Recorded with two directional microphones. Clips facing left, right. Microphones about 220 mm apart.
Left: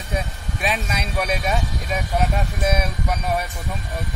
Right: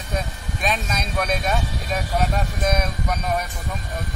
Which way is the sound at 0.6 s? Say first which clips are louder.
Even; 10° left (ahead or behind).